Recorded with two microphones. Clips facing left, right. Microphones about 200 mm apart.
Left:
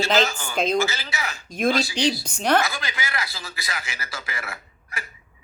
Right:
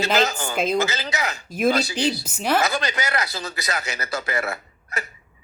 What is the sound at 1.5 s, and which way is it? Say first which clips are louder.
Speech: right 1 dB; 5° right (ahead or behind).